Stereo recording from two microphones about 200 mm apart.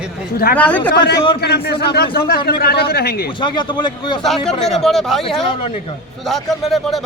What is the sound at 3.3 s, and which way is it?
A man's voice, 25° left (ahead or behind).